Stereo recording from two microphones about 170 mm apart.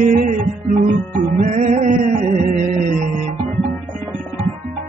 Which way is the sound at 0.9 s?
45° right (ahead or behind).